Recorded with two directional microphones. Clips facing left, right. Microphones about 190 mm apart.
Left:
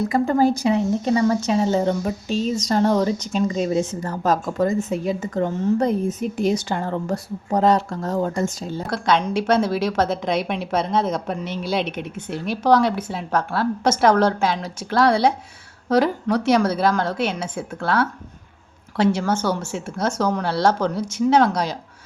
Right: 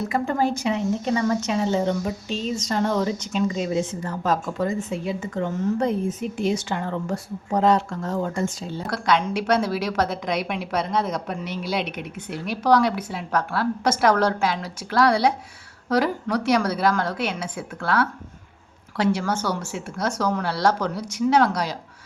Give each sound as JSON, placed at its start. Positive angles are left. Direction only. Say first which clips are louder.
{"t": 0.1, "sound": "a woman's voice", "louder": "left 5 dB", "side_deg": 35}
{"t": 8.9, "sound": "a woman's voice", "louder": "left 2 dB", "side_deg": 25}